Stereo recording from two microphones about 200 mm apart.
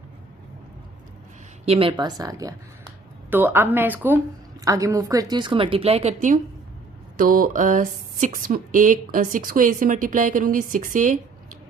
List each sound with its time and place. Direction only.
1.6 s a woman's voice: 30° right (ahead or behind)
7.2 s mantra: 45° right (ahead or behind)
8.2 s a woman's voice: 45° right (ahead or behind)